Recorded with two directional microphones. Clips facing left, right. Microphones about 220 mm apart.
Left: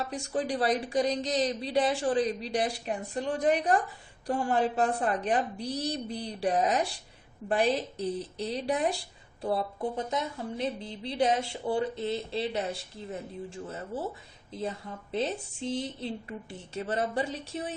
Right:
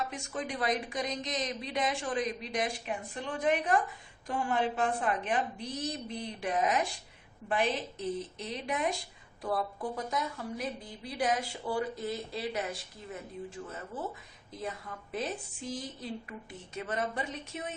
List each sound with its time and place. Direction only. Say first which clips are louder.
0.0 s a woman's voice: left 5 dB; 35° left (ahead or behind)